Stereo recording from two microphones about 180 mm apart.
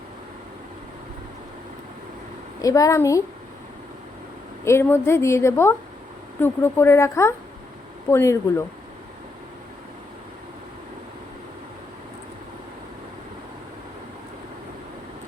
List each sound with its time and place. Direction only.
2.6 s a woman's voice: 20° left (ahead or behind)
4.6 s a woman's voice: 15° left (ahead or behind)